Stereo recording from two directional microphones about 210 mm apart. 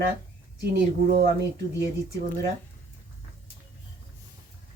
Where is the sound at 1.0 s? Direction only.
50° right (ahead or behind).